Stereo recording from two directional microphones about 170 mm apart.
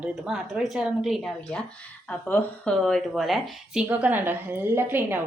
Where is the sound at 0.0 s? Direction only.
5° right (ahead or behind).